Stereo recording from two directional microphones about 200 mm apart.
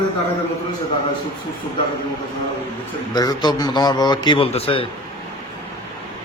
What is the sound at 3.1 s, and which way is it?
A man's voice, 20° left (ahead or behind).